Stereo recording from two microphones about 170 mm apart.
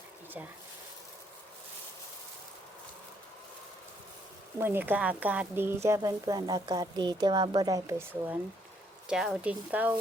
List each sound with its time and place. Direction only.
4.6 s speech: 10° right (ahead or behind)
9.0 s speech: 5° right (ahead or behind)